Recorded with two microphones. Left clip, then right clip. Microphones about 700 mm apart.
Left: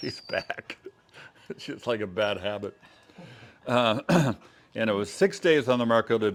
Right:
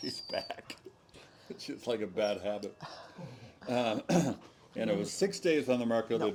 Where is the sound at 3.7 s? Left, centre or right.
Left.